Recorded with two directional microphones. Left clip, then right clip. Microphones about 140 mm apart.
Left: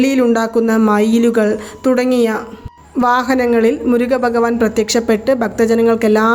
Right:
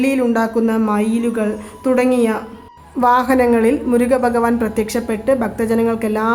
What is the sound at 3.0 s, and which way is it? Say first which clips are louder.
A woman's voice: even; 25° left (ahead or behind).